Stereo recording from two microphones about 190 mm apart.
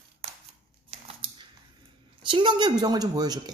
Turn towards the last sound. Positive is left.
turn(degrees=-20)  # may be behind; listen again after turning